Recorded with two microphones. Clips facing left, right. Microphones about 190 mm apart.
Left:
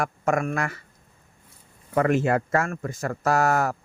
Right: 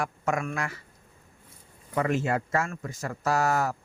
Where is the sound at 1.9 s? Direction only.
60° left (ahead or behind).